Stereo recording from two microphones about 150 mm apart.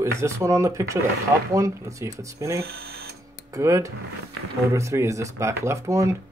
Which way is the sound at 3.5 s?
20° right (ahead or behind).